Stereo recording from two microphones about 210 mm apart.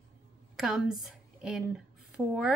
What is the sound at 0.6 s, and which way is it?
A woman's voice, centre (ahead or behind).